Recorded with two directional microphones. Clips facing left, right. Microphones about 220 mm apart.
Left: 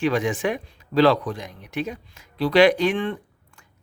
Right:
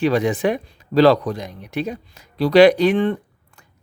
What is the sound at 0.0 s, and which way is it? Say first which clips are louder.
Speech: right 4 dB; 35° right (ahead or behind).